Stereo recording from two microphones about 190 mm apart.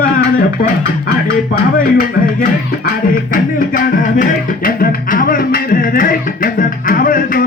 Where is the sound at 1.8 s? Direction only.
50° left (ahead or behind).